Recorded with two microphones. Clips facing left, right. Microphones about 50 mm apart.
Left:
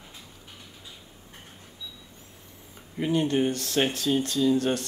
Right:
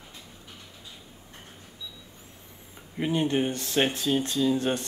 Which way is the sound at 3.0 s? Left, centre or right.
Centre.